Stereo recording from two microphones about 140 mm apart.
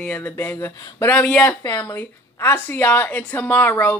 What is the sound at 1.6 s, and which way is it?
A woman's voice, 20° left (ahead or behind).